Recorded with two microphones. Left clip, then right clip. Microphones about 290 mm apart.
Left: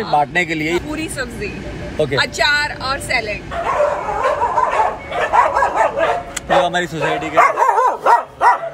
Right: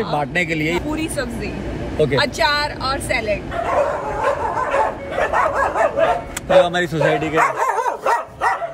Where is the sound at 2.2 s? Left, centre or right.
Centre.